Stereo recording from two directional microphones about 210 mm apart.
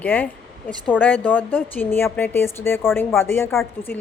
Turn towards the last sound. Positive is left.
turn(degrees=10)  # may be behind; listen again after turning